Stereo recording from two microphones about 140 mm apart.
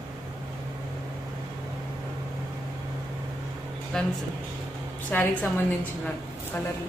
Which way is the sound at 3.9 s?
5° left (ahead or behind).